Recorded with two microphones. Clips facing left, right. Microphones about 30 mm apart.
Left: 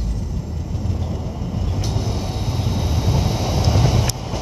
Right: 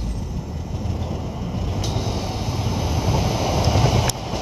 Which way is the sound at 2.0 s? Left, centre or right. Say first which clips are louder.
Even; centre.